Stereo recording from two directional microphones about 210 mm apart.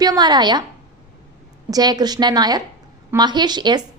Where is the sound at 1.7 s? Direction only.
20° right (ahead or behind).